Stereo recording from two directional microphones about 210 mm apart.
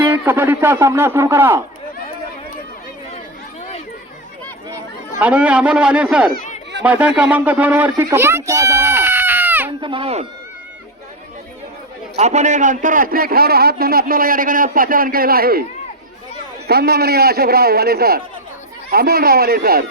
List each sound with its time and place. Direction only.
0.1 s a man's voice: 10° right (ahead or behind)
5.2 s a man's voice: 5° right (ahead or behind)
9.8 s speech: 25° right (ahead or behind)
12.1 s a man's voice: 30° right (ahead or behind)
16.6 s a man's voice: 50° right (ahead or behind)